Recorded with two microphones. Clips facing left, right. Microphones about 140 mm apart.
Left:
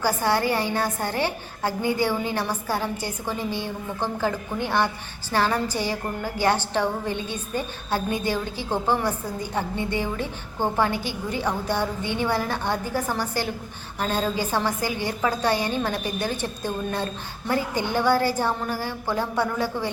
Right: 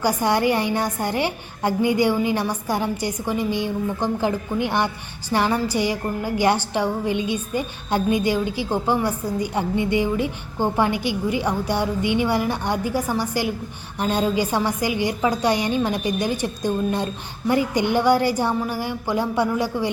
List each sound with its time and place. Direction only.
0.0 s a woman's voice: 15° right (ahead or behind)